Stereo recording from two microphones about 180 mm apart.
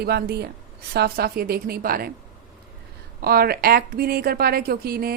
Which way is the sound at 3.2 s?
60° right (ahead or behind).